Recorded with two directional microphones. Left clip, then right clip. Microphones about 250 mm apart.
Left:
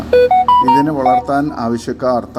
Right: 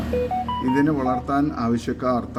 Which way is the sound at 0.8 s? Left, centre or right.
Centre.